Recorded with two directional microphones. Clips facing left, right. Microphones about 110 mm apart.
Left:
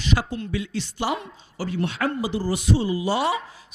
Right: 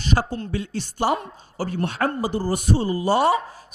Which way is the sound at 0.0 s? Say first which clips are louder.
Right 2 dB; 40° right (ahead or behind).